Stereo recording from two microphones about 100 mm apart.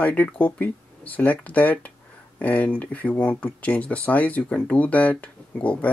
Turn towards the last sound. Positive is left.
turn(degrees=15)  # may be behind; listen again after turning